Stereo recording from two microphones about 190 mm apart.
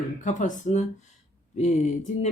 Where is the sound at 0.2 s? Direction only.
40° left (ahead or behind).